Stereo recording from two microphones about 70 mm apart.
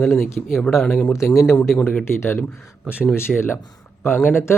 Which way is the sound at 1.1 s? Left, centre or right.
Left.